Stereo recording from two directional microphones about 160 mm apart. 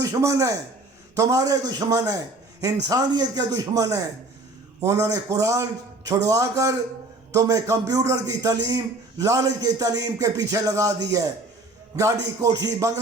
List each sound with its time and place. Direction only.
0.0 s a man's voice: 20° right (ahead or behind)